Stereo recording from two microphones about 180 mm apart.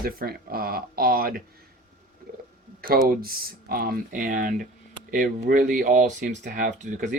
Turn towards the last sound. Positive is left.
turn(degrees=-45)  # may be behind; listen again after turning